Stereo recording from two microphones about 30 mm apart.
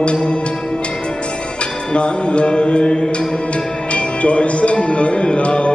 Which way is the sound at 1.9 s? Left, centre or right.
Left.